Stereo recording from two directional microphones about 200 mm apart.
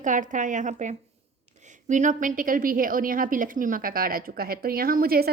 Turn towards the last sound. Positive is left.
turn(degrees=-50)  # may be behind; listen again after turning